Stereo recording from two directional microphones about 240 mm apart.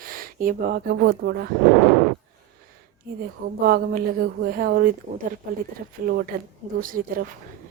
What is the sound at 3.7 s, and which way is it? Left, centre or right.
Speech, right.